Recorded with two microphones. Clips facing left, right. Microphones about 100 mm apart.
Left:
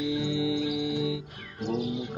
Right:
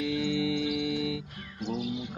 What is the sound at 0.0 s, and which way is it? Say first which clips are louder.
Music: left 1 dB; 20° left (ahead or behind).